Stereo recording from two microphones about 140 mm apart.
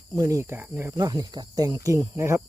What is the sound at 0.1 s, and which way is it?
Speech, 20° right (ahead or behind).